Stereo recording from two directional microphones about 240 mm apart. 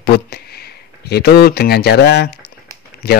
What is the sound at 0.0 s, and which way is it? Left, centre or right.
Speech, left.